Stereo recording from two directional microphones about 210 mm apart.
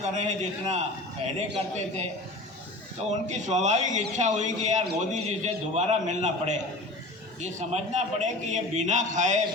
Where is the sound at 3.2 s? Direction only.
35° right (ahead or behind).